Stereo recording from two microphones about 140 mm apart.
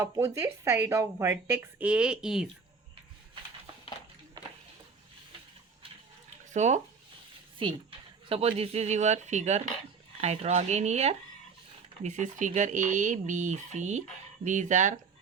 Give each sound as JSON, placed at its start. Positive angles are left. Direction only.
{"t": 0.0, "sound": "a woman's voice", "side_deg": -20}
{"t": 6.5, "sound": "speech", "side_deg": -55}
{"t": 7.6, "sound": "speech", "side_deg": -40}
{"t": 12.0, "sound": "speech", "side_deg": -60}